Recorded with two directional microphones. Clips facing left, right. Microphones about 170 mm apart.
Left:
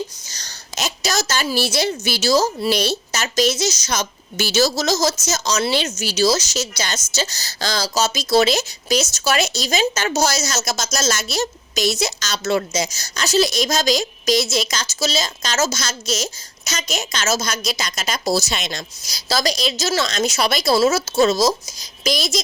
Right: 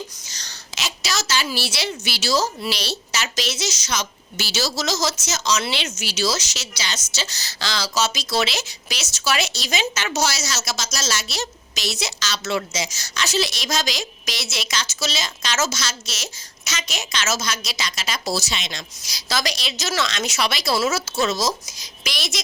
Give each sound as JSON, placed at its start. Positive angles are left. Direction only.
{"t": 0.3, "sound": "a woman's voice", "side_deg": 40}